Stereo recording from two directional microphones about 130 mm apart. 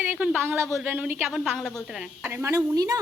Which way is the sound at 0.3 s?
15° right (ahead or behind).